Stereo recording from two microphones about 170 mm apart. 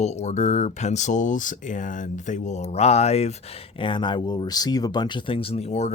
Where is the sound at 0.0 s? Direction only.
40° left (ahead or behind).